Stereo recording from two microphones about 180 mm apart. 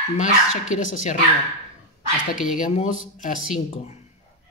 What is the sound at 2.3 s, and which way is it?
Speech, 5° right (ahead or behind).